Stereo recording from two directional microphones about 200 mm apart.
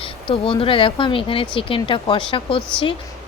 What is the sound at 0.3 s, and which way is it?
Speech, 25° left (ahead or behind).